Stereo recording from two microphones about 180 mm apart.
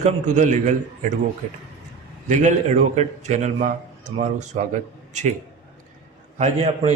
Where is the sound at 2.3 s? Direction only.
40° right (ahead or behind).